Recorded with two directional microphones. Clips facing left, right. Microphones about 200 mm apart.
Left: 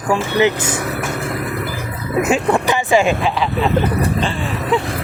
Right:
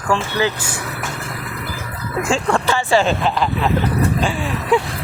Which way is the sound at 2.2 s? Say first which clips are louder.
Left 2 dB; 20° left (ahead or behind).